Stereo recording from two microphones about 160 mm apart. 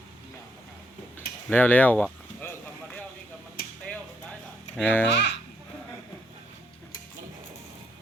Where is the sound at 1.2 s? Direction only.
10° left (ahead or behind).